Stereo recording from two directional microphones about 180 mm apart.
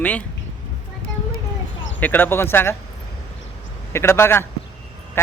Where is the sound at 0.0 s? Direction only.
10° left (ahead or behind).